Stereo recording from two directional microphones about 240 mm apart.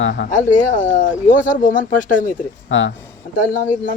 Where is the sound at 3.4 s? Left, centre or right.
Left.